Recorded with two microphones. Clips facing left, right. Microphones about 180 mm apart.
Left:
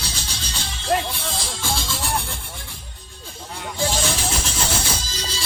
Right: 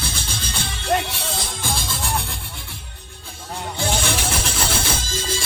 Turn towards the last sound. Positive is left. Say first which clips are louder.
# right 4 dB
turn(degrees=-50)  # may be behind; listen again after turning